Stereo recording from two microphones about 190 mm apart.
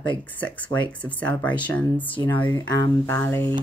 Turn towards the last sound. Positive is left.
turn(degrees=10)  # may be behind; listen again after turning